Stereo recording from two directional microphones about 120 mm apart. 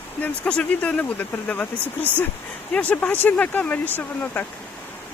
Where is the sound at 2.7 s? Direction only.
10° left (ahead or behind).